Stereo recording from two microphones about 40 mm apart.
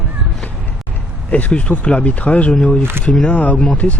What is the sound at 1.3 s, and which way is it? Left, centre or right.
Speech, left.